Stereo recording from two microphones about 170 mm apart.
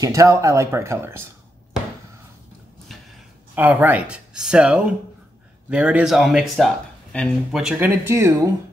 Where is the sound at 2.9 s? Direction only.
Centre (ahead or behind).